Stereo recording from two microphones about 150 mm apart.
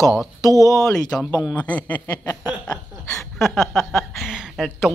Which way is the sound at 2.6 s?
5° left (ahead or behind).